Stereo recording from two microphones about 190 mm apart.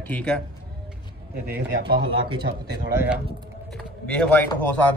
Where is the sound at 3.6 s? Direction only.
5° left (ahead or behind).